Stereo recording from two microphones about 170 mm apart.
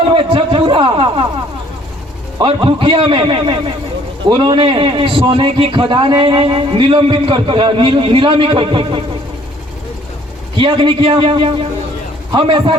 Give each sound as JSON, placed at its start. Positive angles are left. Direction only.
{"t": 0.1, "sound": "a sound", "side_deg": -30}
{"t": 2.6, "sound": "a man's voice", "side_deg": -30}
{"t": 10.6, "sound": "a man's voice", "side_deg": -30}